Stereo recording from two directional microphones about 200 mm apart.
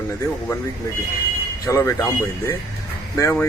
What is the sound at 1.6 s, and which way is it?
A man's voice, 15° left (ahead or behind).